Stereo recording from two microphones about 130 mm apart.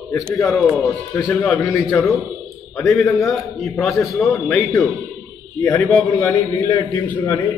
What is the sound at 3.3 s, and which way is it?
A man's voice, centre (ahead or behind).